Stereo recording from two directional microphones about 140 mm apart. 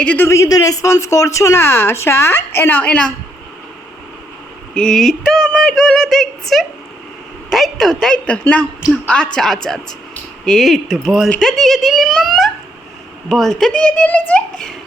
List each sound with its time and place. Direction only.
0.0 s speech: 10° left (ahead or behind)
4.7 s speech: 5° left (ahead or behind)